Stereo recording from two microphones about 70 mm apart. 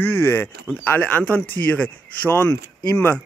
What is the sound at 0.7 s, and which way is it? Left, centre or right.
Speech, left.